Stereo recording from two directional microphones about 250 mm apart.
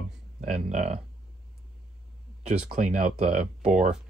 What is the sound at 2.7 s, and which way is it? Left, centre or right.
Speech, right.